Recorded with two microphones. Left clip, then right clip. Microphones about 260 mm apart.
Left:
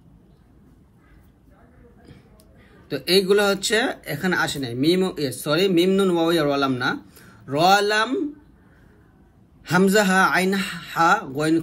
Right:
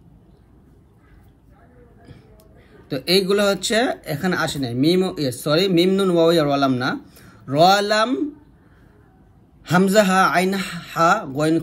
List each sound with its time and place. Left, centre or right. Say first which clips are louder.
2.9 s speech: even; centre
10.0 s speech: right 2 dB; centre